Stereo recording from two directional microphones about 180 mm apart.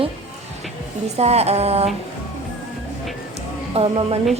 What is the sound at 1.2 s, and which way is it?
Speech, 35° right (ahead or behind).